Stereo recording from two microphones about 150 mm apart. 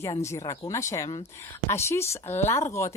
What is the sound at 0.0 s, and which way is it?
Speech, 20° left (ahead or behind).